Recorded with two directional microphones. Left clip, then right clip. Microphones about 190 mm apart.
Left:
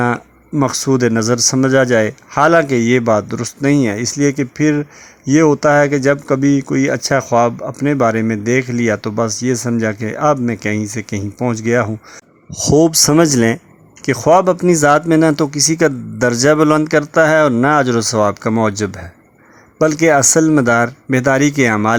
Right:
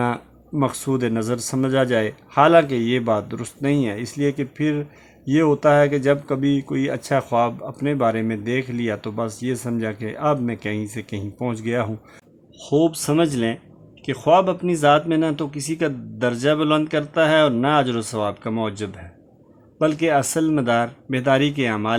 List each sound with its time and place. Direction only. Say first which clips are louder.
0.0 s speech: left 7 dB; 30° left (ahead or behind)
12.7 s speech: left 8 dB; 45° left (ahead or behind)